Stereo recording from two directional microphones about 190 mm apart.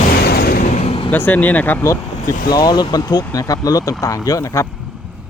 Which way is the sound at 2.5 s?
20° left (ahead or behind).